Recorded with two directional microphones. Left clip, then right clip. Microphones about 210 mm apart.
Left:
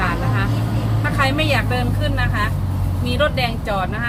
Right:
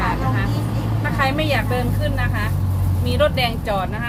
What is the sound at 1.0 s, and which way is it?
Speech, centre (ahead or behind).